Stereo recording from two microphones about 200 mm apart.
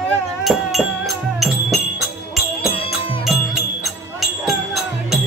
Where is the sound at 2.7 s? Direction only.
25° left (ahead or behind).